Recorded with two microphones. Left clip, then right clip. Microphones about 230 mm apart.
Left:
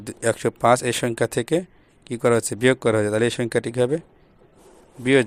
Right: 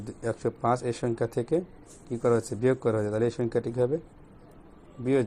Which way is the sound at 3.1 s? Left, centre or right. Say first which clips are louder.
Left 6 dB; left.